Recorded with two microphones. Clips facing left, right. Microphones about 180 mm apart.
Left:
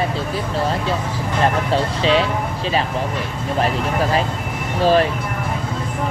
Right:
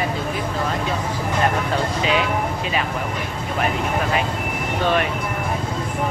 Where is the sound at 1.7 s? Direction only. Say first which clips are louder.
Left 4 dB; 30° left (ahead or behind).